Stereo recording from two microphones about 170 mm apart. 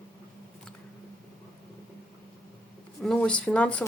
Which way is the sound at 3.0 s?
5° left (ahead or behind).